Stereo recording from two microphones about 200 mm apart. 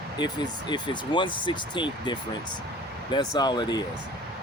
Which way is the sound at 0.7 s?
25° left (ahead or behind).